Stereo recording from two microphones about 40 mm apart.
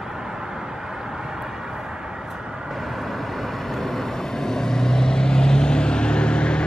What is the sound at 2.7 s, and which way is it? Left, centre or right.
Vehicle, centre.